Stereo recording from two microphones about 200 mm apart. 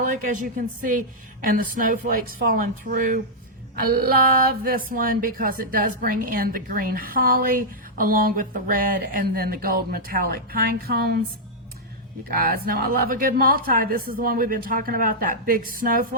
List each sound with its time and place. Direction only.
0.0 s speech: 45° right (ahead or behind)
12.3 s speech: 45° right (ahead or behind)